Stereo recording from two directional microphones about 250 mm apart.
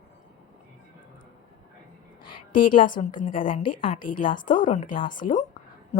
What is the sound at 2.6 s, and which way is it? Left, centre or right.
Speech, left.